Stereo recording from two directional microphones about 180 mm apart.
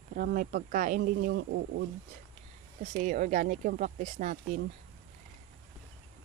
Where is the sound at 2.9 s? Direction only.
45° right (ahead or behind).